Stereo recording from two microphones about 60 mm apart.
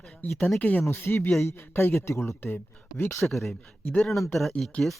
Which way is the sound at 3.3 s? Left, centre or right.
Centre.